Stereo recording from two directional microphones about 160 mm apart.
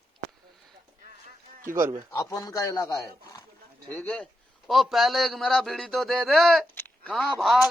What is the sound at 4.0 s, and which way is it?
A man's voice, 10° left (ahead or behind).